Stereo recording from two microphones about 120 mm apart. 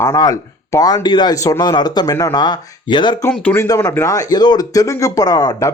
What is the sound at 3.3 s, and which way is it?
Speech, 10° left (ahead or behind).